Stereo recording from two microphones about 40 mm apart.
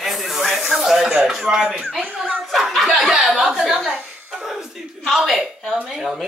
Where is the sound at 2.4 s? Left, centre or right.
Centre.